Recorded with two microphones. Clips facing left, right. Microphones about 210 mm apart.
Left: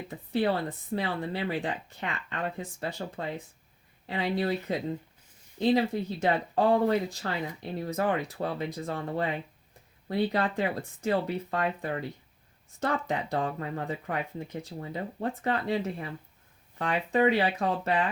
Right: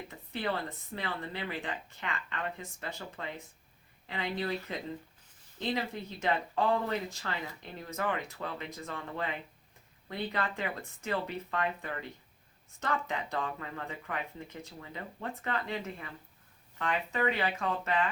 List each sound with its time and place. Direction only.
0.9 s speech: 35° left (ahead or behind)